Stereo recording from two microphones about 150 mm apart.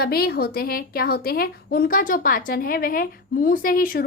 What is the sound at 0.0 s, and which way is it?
A woman's voice, 90° left.